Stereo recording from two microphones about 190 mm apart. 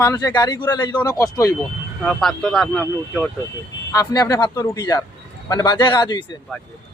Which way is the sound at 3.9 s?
20° left (ahead or behind).